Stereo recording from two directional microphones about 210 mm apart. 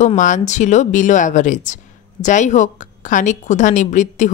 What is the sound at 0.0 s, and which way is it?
Speech, 35° left (ahead or behind).